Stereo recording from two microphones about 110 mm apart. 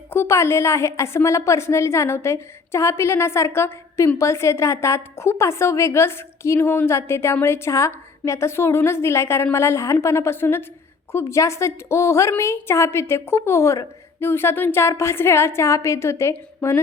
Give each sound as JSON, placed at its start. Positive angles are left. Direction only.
{"t": 0.1, "sound": "a woman's voice", "side_deg": 25}